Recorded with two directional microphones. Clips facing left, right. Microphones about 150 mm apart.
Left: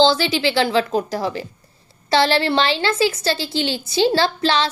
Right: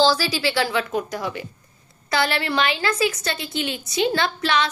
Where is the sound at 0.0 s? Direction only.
25° left (ahead or behind).